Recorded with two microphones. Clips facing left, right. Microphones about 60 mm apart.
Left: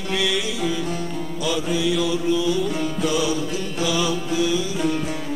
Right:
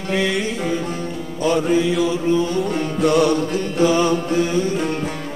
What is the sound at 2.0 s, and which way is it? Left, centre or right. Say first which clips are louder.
Mantra: right 3 dB; right.